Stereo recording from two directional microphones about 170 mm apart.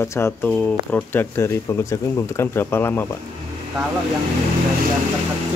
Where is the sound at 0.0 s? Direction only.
15° left (ahead or behind).